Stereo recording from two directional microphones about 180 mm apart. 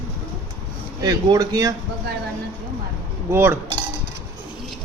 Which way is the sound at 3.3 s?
10° right (ahead or behind).